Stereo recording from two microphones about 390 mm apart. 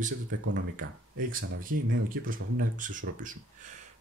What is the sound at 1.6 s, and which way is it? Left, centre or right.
Speech, right.